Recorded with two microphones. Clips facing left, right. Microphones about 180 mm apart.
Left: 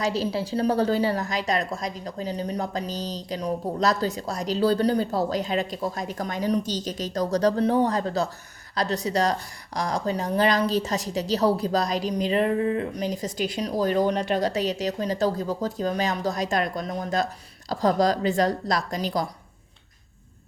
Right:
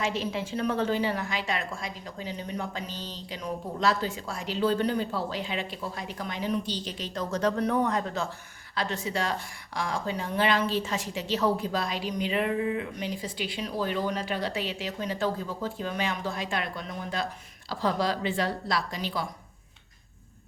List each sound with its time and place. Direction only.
0.0 s a woman's voice: 35° left (ahead or behind)